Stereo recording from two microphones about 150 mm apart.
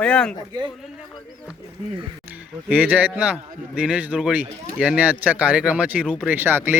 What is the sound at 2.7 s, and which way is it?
A man's voice, 10° right (ahead or behind).